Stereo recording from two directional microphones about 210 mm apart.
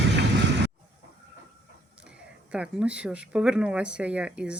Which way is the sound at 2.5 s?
5° right (ahead or behind).